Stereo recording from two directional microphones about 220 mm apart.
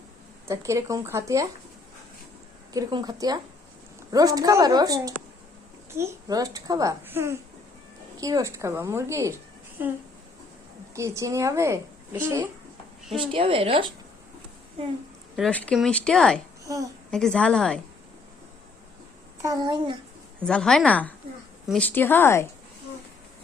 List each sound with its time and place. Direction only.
0.4 s a child's voice: 15° right (ahead or behind)
2.7 s a child's voice: 20° right (ahead or behind)
13.1 s a woman's voice: 25° right (ahead or behind)
15.4 s speech: 5° left (ahead or behind)
16.6 s a child's voice: 15° right (ahead or behind)
17.1 s speech: 5° left (ahead or behind)
19.4 s a child's voice: 15° right (ahead or behind)
20.4 s speech: 5° left (ahead or behind)